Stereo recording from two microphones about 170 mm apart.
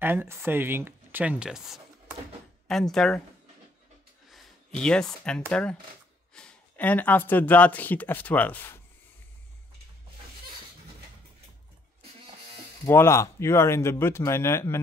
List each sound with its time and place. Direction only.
0.0 s speech: 15° right (ahead or behind); by 3.2 s 5° left (ahead or behind)
4.3 s a sound: centre (ahead or behind)
5.5 s speech: 5° left (ahead or behind)
12.8 s speech: 15° left (ahead or behind)